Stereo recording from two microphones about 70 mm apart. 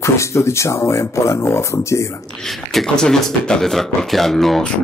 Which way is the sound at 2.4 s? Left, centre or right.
Centre.